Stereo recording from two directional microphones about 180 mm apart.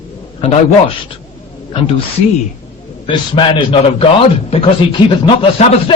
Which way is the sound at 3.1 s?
25° left (ahead or behind).